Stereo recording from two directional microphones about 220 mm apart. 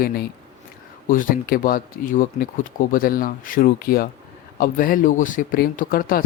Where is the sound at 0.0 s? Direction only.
45° left (ahead or behind).